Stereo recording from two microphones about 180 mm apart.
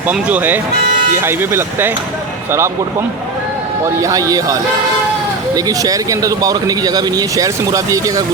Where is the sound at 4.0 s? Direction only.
20° right (ahead or behind).